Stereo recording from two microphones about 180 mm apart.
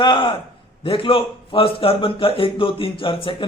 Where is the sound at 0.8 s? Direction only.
30° left (ahead or behind).